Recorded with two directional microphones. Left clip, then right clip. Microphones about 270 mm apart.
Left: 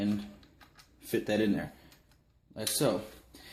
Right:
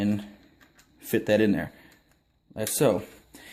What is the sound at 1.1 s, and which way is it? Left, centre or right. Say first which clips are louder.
Speech: right 7 dB; right.